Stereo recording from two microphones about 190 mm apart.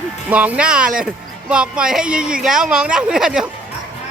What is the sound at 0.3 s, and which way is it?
A woman's voice, 10° right (ahead or behind).